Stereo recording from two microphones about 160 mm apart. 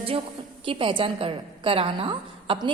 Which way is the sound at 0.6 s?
30° right (ahead or behind).